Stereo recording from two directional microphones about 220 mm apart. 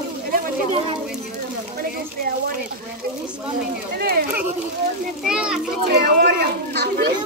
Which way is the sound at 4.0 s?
45° right (ahead or behind).